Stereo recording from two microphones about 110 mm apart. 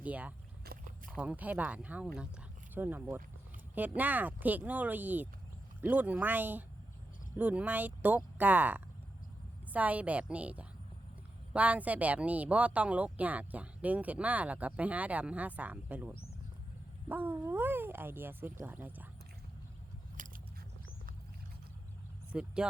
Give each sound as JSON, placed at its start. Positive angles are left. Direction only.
{"t": 0.0, "sound": "speech", "side_deg": -15}
{"t": 22.3, "sound": "speech", "side_deg": -10}